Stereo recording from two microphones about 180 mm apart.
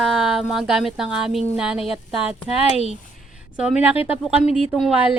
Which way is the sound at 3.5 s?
5° right (ahead or behind).